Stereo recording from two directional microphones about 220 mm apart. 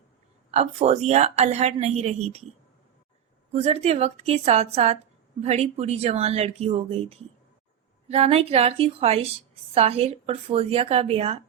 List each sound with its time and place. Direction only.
0.5 s a woman's voice: 30° right (ahead or behind)
3.5 s a woman's voice: 30° right (ahead or behind)